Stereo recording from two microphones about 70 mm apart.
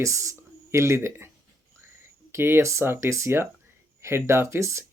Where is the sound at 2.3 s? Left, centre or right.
Right.